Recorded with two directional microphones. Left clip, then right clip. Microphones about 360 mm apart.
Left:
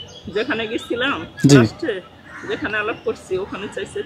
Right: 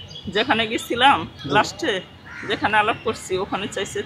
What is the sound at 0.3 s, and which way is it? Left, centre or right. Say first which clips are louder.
Speech: right 2 dB; right.